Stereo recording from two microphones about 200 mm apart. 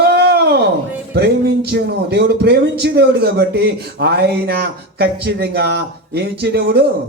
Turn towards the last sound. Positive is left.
turn(degrees=-55)  # may be behind; listen again after turning